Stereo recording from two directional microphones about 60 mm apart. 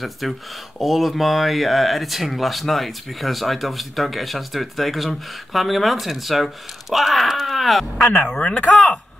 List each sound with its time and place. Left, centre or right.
0.2 s speech: centre
8.1 s speech: centre